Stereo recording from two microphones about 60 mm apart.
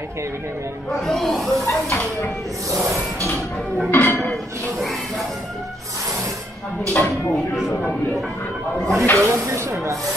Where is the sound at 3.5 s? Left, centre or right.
Centre.